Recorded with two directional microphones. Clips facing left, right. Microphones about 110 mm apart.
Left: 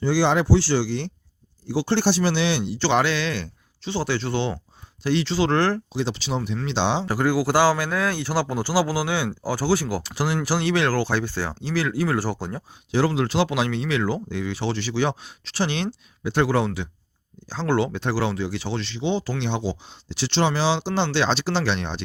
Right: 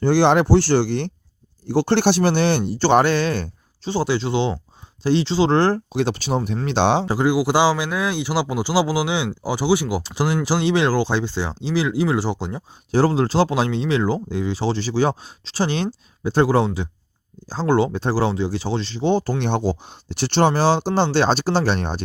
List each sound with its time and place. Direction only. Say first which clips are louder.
0.0 s speech: right 5 dB; 60° right (ahead or behind); by 5.8 s 30° right (ahead or behind)
5.9 s speech: right 5 dB; 55° right (ahead or behind)
7.0 s speech: right 3 dB; 20° right (ahead or behind)
12.9 s speech: right 4 dB; 35° right (ahead or behind)